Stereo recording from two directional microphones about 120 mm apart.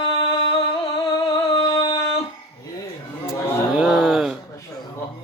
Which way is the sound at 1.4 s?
30° left (ahead or behind).